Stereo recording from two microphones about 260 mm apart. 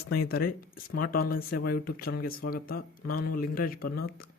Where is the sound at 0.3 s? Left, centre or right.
Left.